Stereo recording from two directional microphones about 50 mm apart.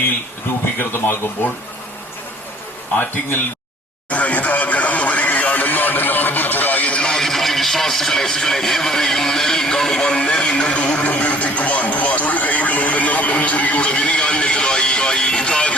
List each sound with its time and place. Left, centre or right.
0.8 s a man's voice: left
4.1 s radio: left
7.2 s music: centre
10.0 s a sound: left